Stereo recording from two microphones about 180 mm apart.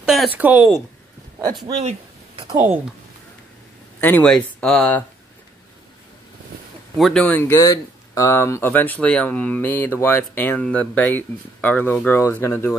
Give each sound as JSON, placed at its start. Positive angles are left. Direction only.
{"t": 0.0, "sound": "speech", "side_deg": 0}
{"t": 1.8, "sound": "a sound", "side_deg": -35}
{"t": 2.5, "sound": "speech", "side_deg": -10}
{"t": 4.0, "sound": "speech", "side_deg": 5}
{"t": 7.0, "sound": "speech", "side_deg": 5}